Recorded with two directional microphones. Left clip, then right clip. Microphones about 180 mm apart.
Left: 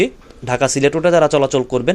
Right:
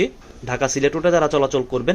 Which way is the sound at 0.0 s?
20° left (ahead or behind).